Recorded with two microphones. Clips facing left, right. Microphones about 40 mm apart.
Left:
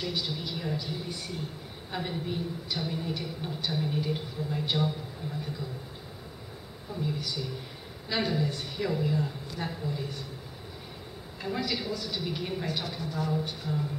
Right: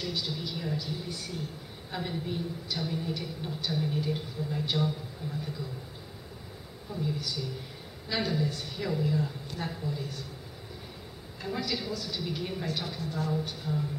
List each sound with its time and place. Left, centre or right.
0.0 s a woman's voice: centre
7.0 s a woman's voice: centre
11.4 s a woman's voice: centre